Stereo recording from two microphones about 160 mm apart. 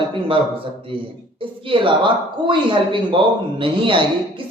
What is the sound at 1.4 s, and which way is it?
Speech, 30° right (ahead or behind).